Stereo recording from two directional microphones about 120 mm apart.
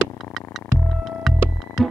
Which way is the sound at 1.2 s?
Centre (ahead or behind).